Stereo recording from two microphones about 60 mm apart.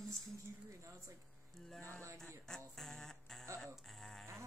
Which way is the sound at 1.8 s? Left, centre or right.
Right.